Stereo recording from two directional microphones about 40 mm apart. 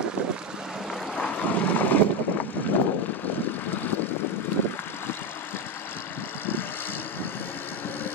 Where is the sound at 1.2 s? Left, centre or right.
Left.